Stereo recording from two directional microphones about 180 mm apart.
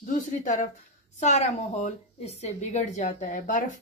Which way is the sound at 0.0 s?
45° left (ahead or behind).